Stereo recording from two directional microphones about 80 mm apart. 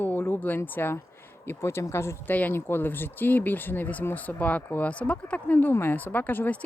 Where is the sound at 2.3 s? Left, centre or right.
Left.